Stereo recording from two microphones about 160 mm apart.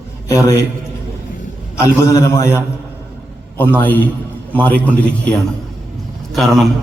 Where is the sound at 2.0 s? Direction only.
20° left (ahead or behind).